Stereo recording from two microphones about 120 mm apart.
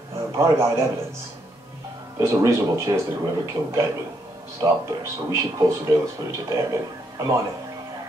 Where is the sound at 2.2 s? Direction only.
25° right (ahead or behind).